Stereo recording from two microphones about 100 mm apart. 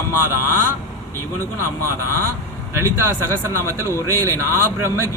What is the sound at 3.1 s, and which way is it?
Speech, 30° right (ahead or behind).